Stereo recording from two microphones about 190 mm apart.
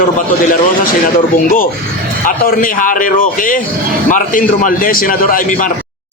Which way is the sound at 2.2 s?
45° left (ahead or behind).